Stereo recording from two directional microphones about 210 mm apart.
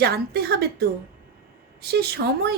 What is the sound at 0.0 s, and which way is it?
A woman's voice, 50° right (ahead or behind).